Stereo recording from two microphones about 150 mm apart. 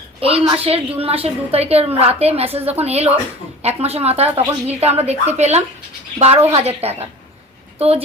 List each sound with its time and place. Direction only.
0.2 s a woman's voice: 40° right (ahead or behind)